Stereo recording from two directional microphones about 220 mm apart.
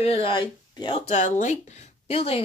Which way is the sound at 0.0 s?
25° left (ahead or behind).